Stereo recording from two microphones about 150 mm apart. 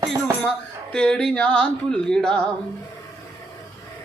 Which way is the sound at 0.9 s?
5° left (ahead or behind).